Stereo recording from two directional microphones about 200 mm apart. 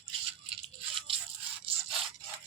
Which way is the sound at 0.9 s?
25° right (ahead or behind).